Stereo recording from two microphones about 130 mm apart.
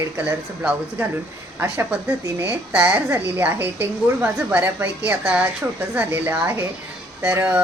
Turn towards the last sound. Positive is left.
turn(degrees=-10)  # may be behind; listen again after turning